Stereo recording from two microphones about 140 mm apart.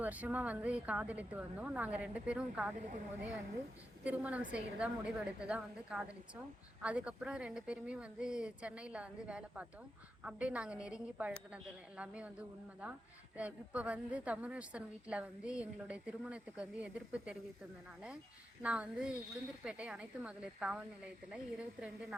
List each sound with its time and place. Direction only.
0.0 s a woman's voice: 10° right (ahead or behind)
2.7 s speech: 65° right (ahead or behind)
4.0 s a woman's voice: 10° right (ahead or behind)
18.6 s a woman's voice: 10° right (ahead or behind)